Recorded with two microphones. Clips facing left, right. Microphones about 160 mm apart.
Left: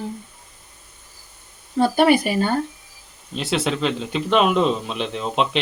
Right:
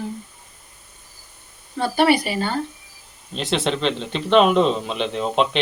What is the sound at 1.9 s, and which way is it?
Speech, 50° left (ahead or behind).